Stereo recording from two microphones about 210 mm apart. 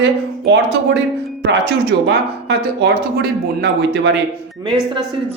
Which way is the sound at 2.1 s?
55° right (ahead or behind).